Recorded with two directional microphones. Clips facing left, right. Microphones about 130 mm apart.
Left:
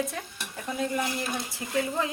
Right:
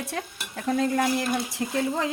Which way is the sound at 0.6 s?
75° right (ahead or behind).